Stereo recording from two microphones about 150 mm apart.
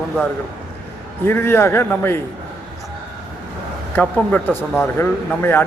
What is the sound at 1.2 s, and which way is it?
Speech, 15° left (ahead or behind).